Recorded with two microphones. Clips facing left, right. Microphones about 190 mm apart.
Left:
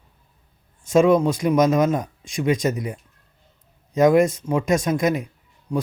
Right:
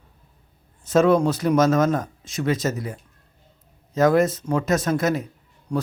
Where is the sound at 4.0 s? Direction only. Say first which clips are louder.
Left 2 dB; 15° left (ahead or behind).